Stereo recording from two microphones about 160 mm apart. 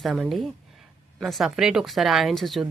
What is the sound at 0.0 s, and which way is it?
Speech, centre (ahead or behind).